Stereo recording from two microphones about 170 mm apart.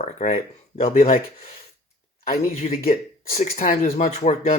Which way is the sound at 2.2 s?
55° left (ahead or behind).